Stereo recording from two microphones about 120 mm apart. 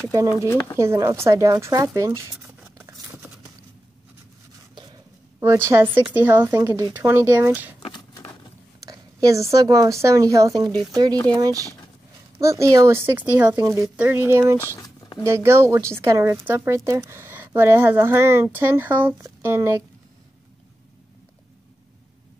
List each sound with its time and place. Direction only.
0.7 s speech: 25° right (ahead or behind)
2.4 s a sound: 15° right (ahead or behind)
5.4 s speech: 25° right (ahead or behind)
8.8 s speech: 25° right (ahead or behind)
13.6 s speech: 25° right (ahead or behind)
13.8 s speech: 15° right (ahead or behind)
14.8 s zipper: 30° left (ahead or behind)
15.2 s speech: 20° right (ahead or behind)